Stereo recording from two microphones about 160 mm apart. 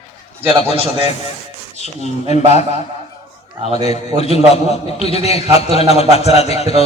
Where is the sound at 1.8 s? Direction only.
45° left (ahead or behind).